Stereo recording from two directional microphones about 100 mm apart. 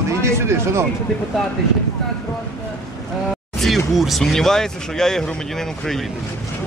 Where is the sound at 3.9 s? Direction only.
Centre (ahead or behind).